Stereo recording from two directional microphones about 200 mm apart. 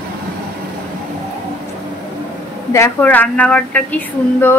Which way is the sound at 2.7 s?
10° left (ahead or behind).